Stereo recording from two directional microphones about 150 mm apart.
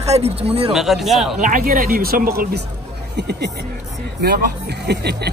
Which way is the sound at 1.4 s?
65° right (ahead or behind).